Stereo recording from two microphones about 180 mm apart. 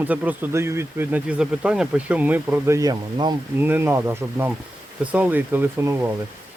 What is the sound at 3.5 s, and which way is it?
Speech, 10° right (ahead or behind).